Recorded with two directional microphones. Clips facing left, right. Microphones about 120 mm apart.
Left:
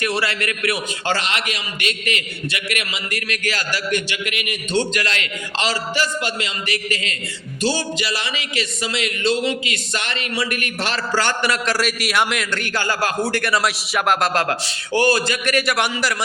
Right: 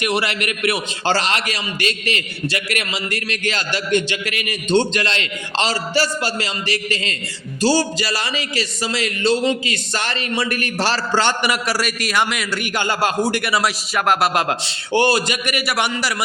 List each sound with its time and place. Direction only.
0.0 s a man's voice: 20° right (ahead or behind)
13.4 s a man's voice: 5° right (ahead or behind)
14.4 s a man's voice: 25° right (ahead or behind); by 16.1 s 5° right (ahead or behind)